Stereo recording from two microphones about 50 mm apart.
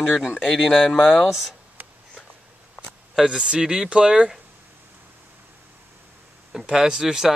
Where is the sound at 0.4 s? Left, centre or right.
Centre.